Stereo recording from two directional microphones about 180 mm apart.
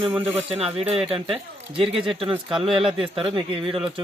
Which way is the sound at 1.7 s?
30° right (ahead or behind).